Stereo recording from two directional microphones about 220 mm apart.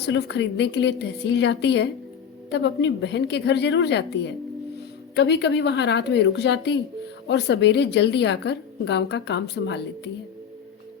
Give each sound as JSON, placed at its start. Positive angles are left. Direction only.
{"t": 0.0, "sound": "a woman's voice", "side_deg": 50}